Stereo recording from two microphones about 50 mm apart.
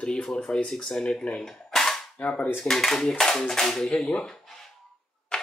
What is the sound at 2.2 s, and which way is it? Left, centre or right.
Speech, left.